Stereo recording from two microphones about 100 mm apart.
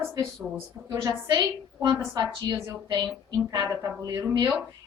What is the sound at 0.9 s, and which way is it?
A woman's voice, 35° right (ahead or behind).